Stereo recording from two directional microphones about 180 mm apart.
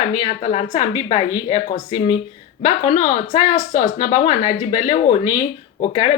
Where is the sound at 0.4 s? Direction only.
40° left (ahead or behind).